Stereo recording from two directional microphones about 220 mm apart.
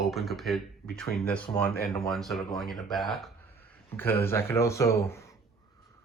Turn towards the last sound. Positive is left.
turn(degrees=10)  # may be behind; listen again after turning